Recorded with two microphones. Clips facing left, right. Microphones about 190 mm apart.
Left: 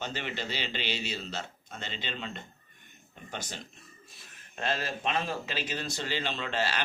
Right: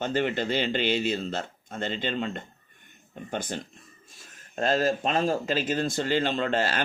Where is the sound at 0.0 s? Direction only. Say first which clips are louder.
Right 10 dB; 50° right (ahead or behind).